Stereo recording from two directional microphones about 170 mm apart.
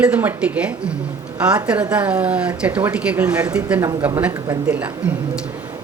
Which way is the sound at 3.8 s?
25° right (ahead or behind).